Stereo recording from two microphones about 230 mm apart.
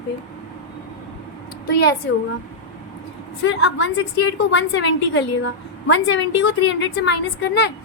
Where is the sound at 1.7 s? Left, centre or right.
Left.